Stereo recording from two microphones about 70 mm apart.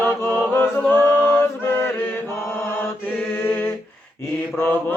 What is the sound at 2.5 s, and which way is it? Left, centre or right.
Mantra, left.